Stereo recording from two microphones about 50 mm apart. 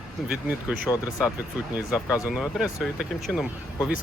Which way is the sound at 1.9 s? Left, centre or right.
Centre.